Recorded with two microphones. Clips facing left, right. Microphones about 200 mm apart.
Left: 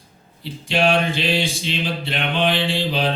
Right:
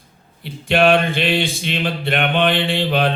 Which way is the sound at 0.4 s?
55° right (ahead or behind).